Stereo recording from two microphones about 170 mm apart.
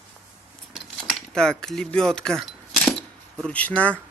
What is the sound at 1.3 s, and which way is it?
Speech, 5° left (ahead or behind).